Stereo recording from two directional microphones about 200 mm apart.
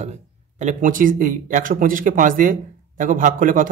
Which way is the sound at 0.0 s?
35° right (ahead or behind).